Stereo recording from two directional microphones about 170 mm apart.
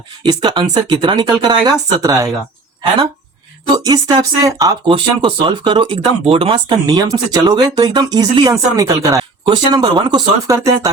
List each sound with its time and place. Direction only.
0.2 s speech: 25° right (ahead or behind)
3.8 s speech: 20° right (ahead or behind)